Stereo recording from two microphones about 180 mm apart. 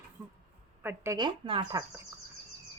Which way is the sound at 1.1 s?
25° right (ahead or behind).